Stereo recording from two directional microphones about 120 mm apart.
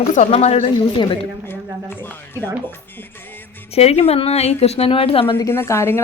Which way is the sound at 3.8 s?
55° left (ahead or behind).